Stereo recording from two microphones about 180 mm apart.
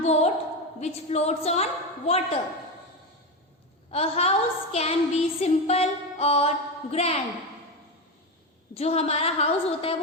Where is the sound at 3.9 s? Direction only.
35° left (ahead or behind).